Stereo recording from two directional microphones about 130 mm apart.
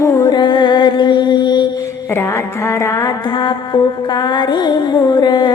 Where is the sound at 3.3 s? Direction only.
35° left (ahead or behind).